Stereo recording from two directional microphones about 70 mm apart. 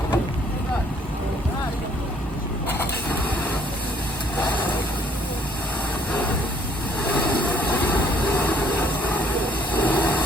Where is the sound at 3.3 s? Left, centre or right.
Left.